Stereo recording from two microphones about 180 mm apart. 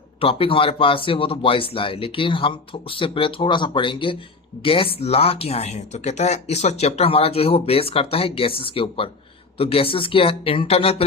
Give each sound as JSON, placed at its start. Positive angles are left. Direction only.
{"t": 0.2, "sound": "speech", "side_deg": 30}